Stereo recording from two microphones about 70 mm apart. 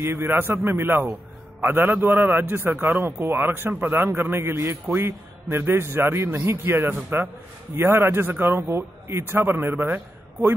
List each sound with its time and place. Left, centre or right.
0.0 s a man's voice: right